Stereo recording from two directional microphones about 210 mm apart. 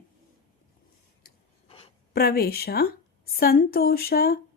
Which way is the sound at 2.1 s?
50° left (ahead or behind).